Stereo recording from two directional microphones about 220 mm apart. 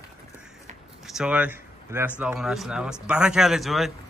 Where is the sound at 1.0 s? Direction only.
5° right (ahead or behind).